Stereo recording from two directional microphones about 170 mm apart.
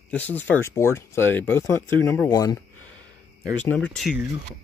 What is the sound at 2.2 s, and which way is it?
Speech, 20° left (ahead or behind).